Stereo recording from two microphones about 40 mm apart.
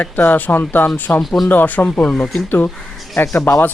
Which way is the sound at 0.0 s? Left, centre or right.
Left.